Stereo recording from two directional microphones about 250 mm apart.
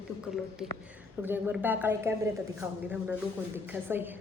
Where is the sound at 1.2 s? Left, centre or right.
Centre.